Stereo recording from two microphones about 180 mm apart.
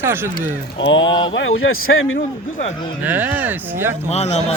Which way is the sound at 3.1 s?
10° right (ahead or behind).